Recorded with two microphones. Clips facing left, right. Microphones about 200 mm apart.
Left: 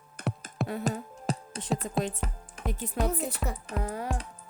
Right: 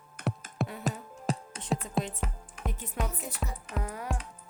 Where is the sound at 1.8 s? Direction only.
40° left (ahead or behind).